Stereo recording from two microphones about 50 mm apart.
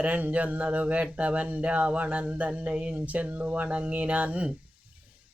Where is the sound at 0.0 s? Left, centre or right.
Right.